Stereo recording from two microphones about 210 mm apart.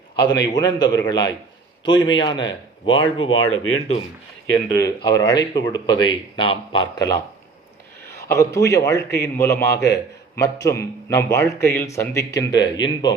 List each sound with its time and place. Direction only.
0.3 s speech: 20° left (ahead or behind)
3.5 s speech: 75° left (ahead or behind)
4.9 s speech: 20° left (ahead or behind)
8.2 s a man's voice: 15° left (ahead or behind)